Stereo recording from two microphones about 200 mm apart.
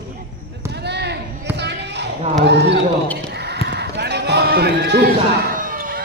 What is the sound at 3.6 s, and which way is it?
Sheep, 55° right (ahead or behind).